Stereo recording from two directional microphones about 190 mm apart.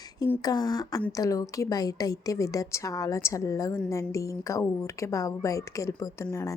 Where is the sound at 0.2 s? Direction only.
20° left (ahead or behind).